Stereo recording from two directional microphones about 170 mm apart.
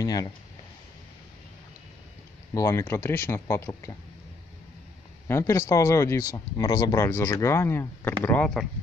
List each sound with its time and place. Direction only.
0.0 s speech: 20° left (ahead or behind)
2.5 s speech: 15° left (ahead or behind)
5.3 s speech: 15° left (ahead or behind)